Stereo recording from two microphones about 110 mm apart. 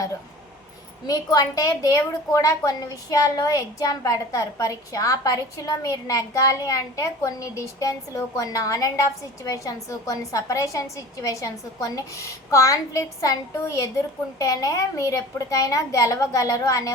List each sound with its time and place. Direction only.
1.0 s a woman's voice: 35° left (ahead or behind)